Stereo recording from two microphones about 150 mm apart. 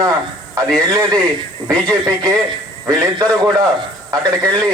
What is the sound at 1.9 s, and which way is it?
A man's voice, 25° right (ahead or behind).